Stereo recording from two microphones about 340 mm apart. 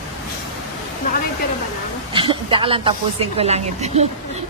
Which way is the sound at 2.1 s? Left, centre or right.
Centre.